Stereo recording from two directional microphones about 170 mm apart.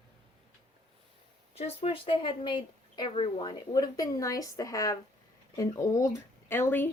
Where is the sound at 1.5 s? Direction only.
35° left (ahead or behind).